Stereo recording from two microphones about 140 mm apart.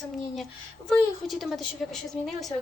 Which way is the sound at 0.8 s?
Centre (ahead or behind).